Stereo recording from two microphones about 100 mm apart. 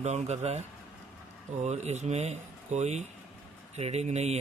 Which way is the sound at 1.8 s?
90° right.